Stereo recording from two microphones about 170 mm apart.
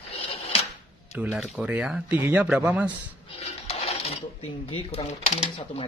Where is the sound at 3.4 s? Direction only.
35° left (ahead or behind).